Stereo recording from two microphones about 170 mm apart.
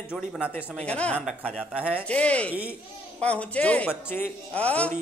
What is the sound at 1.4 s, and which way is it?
Speech, 5° right (ahead or behind).